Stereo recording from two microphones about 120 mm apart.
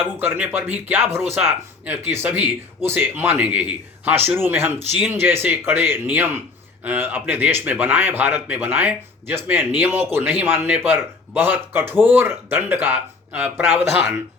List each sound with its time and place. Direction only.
0.2 s a man's voice: 15° right (ahead or behind)